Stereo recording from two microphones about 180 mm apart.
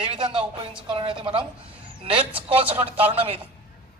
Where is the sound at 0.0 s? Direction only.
30° right (ahead or behind).